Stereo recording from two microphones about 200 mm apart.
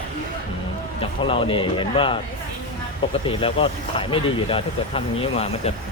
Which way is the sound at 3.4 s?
25° left (ahead or behind).